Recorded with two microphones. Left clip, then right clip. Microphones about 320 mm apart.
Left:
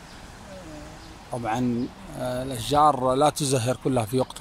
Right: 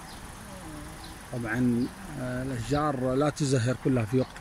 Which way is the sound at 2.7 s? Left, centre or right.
Left.